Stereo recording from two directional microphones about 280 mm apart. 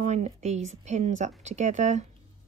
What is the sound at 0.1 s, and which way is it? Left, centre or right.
Speech, right.